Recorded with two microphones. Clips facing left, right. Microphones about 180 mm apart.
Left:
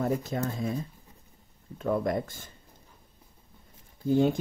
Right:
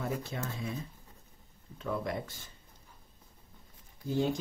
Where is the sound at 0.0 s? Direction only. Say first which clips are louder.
Left 7 dB; 45° left (ahead or behind).